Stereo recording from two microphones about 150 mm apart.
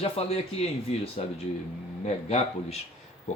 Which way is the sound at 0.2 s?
45° left (ahead or behind).